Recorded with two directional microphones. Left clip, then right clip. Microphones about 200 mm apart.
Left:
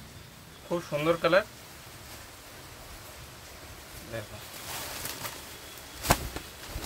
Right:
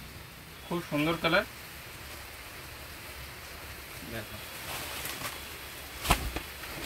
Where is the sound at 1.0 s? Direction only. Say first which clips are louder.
Left 3 dB; 45° left (ahead or behind).